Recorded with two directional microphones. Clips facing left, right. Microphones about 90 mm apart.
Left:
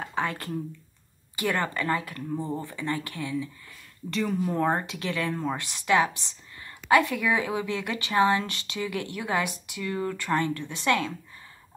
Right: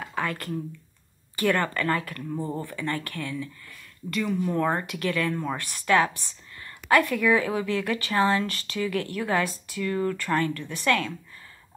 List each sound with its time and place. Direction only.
0.1 s a sound: 25° left (ahead or behind)
1.3 s speech: 20° left (ahead or behind)
4.1 s speech: 35° left (ahead or behind)